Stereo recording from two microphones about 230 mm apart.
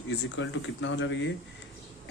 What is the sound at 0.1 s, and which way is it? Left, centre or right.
Speech, left.